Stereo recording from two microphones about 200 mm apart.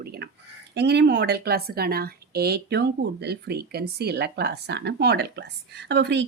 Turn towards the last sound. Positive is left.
turn(degrees=-60)  # may be behind; listen again after turning